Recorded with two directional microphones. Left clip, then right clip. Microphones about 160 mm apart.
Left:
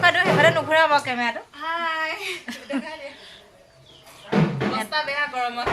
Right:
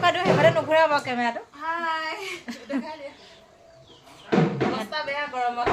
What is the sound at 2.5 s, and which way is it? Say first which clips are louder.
Chuckle: left 3 dB; 5° right (ahead or behind).